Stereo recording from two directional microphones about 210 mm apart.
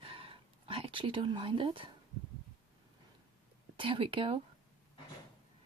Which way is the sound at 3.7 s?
25° right (ahead or behind).